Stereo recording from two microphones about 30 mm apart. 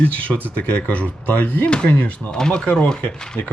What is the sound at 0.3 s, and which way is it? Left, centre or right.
Speech, left.